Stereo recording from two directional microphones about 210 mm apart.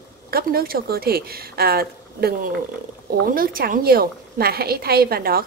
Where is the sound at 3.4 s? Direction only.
45° right (ahead or behind).